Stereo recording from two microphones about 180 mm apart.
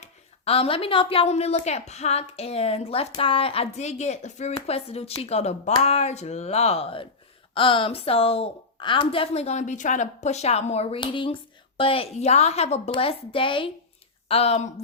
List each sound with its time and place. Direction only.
0.0 s speech: 35° left (ahead or behind)